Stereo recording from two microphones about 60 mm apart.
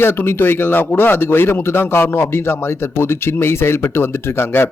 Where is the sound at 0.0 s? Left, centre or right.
Left.